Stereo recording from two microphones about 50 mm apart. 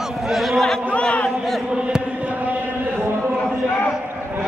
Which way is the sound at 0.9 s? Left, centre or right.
Left.